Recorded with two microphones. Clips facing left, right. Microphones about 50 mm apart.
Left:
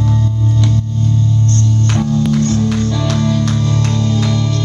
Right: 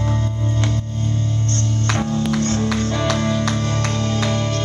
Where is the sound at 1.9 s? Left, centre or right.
Right.